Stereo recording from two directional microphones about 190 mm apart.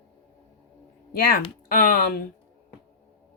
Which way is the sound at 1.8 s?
50° left (ahead or behind).